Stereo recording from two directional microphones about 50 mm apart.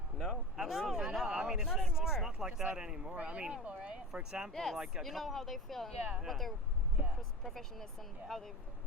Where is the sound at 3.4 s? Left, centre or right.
Centre.